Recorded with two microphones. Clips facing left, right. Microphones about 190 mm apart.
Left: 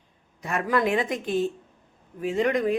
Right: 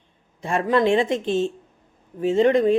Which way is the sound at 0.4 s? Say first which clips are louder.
Right 5 dB; 25° right (ahead or behind).